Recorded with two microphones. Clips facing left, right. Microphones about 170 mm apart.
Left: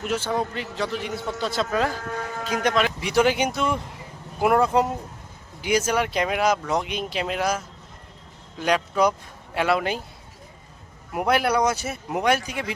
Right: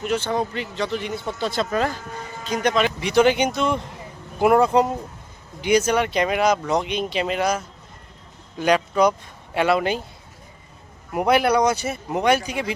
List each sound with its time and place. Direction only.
0.0 s speech: 5° left (ahead or behind)
2.0 s a sound: 70° left (ahead or behind)
2.6 s speech: centre (ahead or behind)
11.1 s speech: centre (ahead or behind)